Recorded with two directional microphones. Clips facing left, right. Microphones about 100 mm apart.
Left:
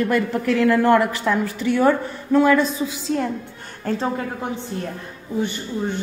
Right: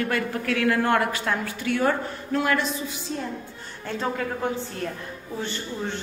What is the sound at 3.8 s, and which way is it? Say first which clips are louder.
Speech: left 5 dB; 30° left (ahead or behind).